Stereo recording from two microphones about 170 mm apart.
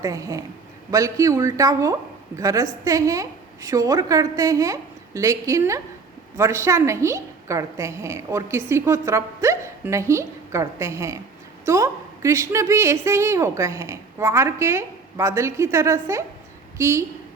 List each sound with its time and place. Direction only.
0.0 s a woman's voice: 20° right (ahead or behind)